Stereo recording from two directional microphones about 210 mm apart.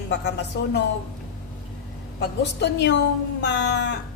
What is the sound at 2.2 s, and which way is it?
A woman's voice, 55° left (ahead or behind).